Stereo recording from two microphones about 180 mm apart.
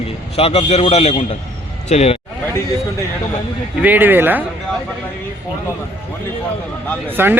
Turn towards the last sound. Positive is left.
turn(degrees=-10)  # may be behind; listen again after turning